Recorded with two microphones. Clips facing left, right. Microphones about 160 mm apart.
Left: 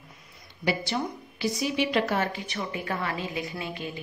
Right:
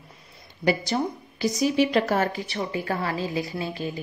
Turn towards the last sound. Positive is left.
turn(degrees=-35)  # may be behind; listen again after turning